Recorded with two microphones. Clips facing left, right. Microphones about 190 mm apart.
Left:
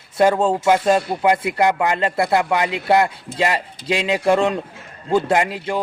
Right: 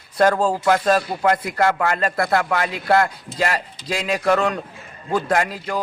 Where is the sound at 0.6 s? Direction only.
10° left (ahead or behind).